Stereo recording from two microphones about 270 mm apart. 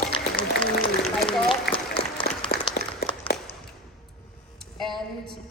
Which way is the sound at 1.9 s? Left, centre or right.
Centre.